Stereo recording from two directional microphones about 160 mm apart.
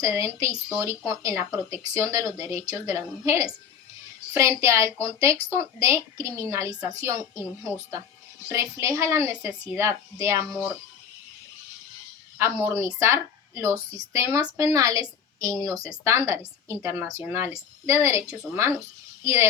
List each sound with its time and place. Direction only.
0.0 s a woman's voice: 20° right (ahead or behind)
8.4 s a woman's voice: 15° right (ahead or behind)
12.4 s a woman's voice: 15° right (ahead or behind)